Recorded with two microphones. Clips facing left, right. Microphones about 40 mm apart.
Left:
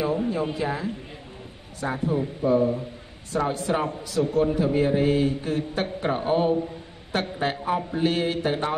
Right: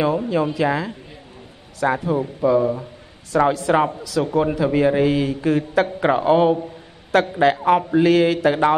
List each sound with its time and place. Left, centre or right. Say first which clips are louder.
0.3 s a man's voice: right 7 dB; right
3.3 s a man's voice: right 8 dB; right